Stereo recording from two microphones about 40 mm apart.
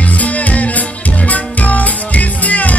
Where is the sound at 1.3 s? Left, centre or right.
Left.